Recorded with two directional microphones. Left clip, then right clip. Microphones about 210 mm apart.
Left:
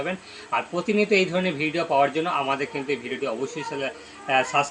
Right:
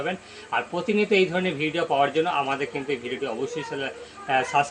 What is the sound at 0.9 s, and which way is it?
Speech, centre (ahead or behind).